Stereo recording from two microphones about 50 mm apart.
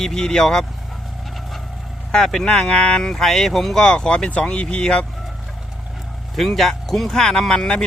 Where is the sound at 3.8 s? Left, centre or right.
Centre.